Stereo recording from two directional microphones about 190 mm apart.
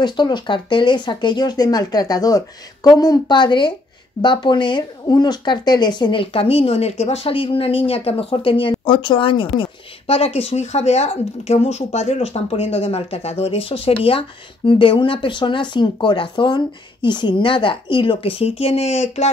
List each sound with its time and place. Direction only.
0.0 s speech: 25° left (ahead or behind)